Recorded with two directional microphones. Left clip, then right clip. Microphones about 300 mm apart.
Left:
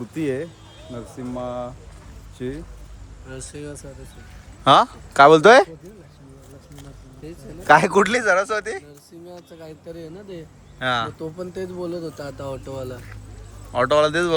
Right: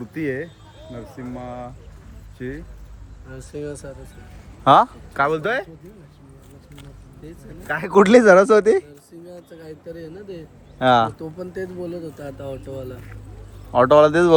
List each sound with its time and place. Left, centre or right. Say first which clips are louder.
0.1 s speech: left 1 dB; centre
4.6 s speech: right 1 dB; centre
5.4 s speech: left 12 dB; centre
7.7 s speech: left 12 dB; centre
7.9 s speech: right 6 dB; centre
9.6 s speech: right 2 dB; centre
10.8 s speech: right 7 dB; centre
11.2 s speech: even; centre
13.7 s speech: right 5 dB; centre